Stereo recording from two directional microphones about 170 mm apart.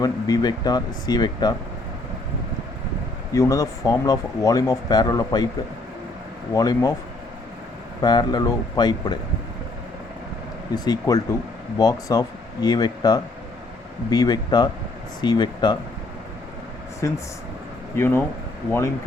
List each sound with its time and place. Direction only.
0.0 s speech: 20° left (ahead or behind)
3.3 s speech: 20° left (ahead or behind)
6.5 s speech: 20° left (ahead or behind)
8.0 s speech: 25° left (ahead or behind)
10.8 s speech: 20° left (ahead or behind)
17.0 s speech: 15° left (ahead or behind)